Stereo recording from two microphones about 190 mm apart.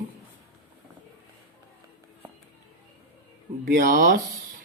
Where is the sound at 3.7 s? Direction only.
45° right (ahead or behind).